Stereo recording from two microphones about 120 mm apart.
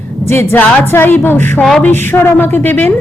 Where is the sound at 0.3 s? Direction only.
20° left (ahead or behind).